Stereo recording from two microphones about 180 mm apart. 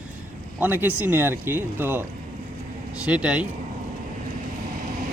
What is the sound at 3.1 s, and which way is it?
Speech, 5° right (ahead or behind).